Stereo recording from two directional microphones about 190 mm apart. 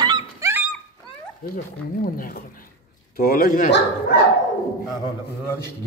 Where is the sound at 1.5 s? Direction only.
45° left (ahead or behind).